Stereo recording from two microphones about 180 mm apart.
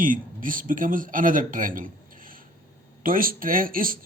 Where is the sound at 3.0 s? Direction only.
50° right (ahead or behind).